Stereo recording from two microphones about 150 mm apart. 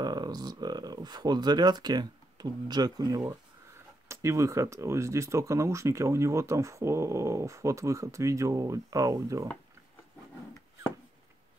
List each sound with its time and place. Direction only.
0.0 s speech: 25° right (ahead or behind)